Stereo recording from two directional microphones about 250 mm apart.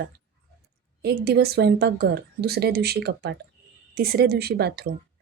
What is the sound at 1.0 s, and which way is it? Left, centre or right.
Speech, right.